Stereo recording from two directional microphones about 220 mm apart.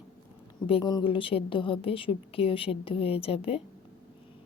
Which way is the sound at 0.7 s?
20° left (ahead or behind).